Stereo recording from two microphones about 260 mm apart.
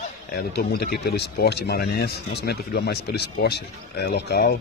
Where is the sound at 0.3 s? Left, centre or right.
Left.